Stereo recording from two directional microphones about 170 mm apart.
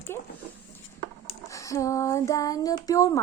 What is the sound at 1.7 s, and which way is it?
A woman's voice, 20° left (ahead or behind).